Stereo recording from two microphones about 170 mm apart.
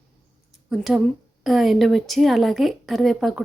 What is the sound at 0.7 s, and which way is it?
Speech, centre (ahead or behind).